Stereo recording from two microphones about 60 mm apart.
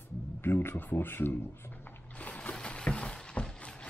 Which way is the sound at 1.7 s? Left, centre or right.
Left.